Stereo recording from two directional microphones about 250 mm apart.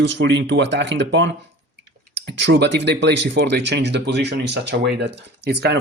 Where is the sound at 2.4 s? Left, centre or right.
Right.